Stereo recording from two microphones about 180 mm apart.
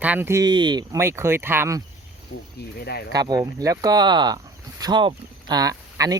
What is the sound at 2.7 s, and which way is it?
Speech, 60° left (ahead or behind).